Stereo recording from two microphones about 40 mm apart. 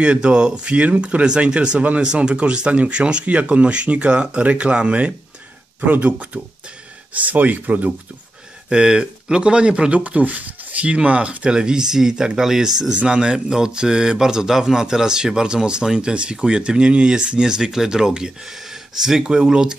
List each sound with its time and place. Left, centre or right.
0.0 s a man's voice: right
5.8 s speech: right
8.6 s a man's voice: right
9.9 s speech: right
11.0 s a man's voice: right